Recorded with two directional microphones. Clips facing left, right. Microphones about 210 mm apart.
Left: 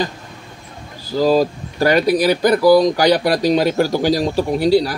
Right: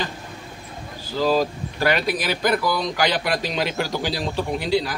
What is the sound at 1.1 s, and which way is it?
Speech, 40° left (ahead or behind).